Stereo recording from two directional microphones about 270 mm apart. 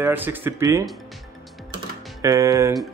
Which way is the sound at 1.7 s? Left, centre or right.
Centre.